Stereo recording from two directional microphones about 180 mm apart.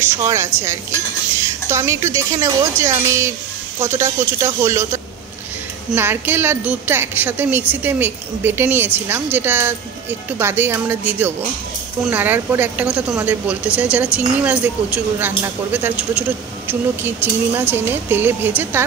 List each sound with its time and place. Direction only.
0.0 s speech: 15° right (ahead or behind)